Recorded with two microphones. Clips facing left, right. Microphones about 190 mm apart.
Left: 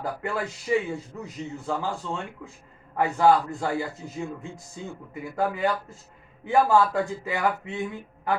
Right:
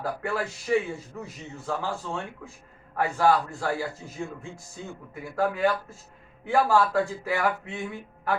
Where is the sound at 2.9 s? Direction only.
20° left (ahead or behind).